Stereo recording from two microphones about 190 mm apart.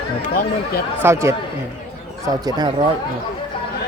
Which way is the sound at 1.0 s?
15° right (ahead or behind).